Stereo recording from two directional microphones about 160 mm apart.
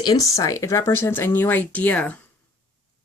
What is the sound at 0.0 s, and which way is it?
Speech, 25° left (ahead or behind).